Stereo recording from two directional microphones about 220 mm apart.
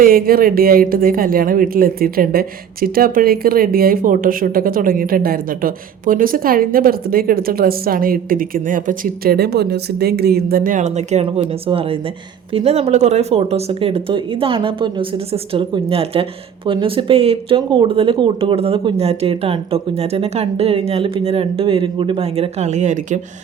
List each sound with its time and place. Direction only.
0.0 s speech: 40° right (ahead or behind)